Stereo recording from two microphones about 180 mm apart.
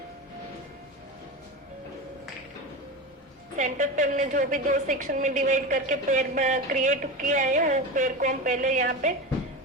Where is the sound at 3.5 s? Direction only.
45° right (ahead or behind).